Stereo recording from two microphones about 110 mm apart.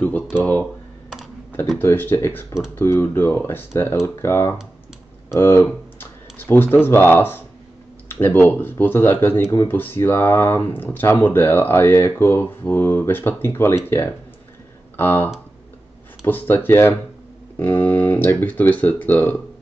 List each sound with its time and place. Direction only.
0.4 s speech: 10° left (ahead or behind)
1.8 s speech: 20° left (ahead or behind)